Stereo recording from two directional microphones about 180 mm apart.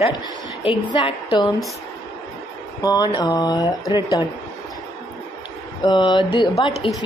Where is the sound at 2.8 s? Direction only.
20° left (ahead or behind).